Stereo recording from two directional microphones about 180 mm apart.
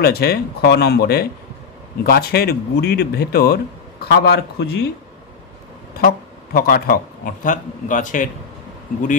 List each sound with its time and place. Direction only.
0.0 s speech: 60° left (ahead or behind)
5.9 s a man's voice: 55° left (ahead or behind)